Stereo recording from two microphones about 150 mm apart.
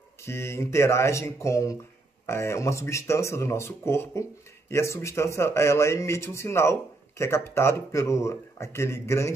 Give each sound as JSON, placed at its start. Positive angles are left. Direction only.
{"t": 0.2, "sound": "speech", "side_deg": 15}